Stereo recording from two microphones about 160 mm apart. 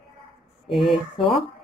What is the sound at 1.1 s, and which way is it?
Speech, 35° left (ahead or behind).